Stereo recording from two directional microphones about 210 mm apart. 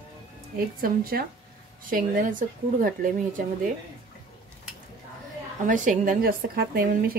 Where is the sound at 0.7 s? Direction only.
45° right (ahead or behind).